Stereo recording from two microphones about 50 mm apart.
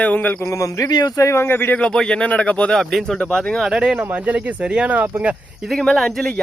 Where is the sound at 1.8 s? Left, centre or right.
Centre.